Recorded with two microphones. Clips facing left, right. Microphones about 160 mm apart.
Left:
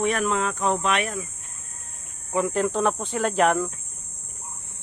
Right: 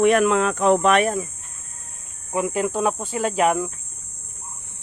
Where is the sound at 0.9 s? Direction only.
40° right (ahead or behind).